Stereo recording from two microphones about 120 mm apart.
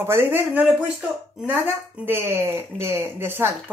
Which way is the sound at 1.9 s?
15° right (ahead or behind).